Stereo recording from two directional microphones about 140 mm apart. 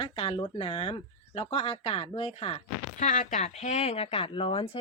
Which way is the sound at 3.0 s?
60° left (ahead or behind).